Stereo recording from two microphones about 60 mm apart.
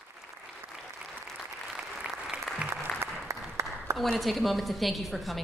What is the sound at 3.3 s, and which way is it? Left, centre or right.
Applause, right.